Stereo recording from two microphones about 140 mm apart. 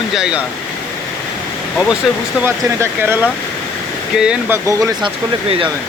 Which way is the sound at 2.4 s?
15° right (ahead or behind).